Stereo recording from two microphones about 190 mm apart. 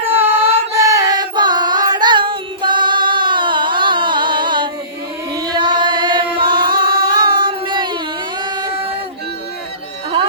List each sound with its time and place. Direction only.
0.1 s singing: 10° right (ahead or behind)
5.3 s chant: 20° right (ahead or behind)
6.4 s music: 25° right (ahead or behind)
8.4 s a sound: 25° right (ahead or behind)